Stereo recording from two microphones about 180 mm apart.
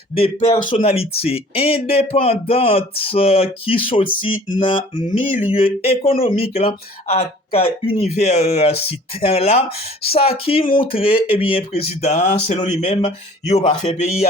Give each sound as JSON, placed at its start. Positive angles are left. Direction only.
{"t": 0.2, "sound": "speech", "side_deg": 35}